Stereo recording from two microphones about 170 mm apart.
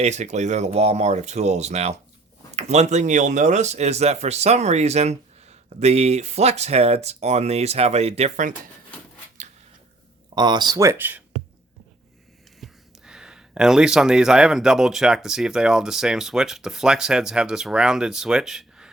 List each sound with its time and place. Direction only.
0.0 s speech: 45° right (ahead or behind)
10.3 s speech: 25° right (ahead or behind)
12.5 s speech: centre (ahead or behind)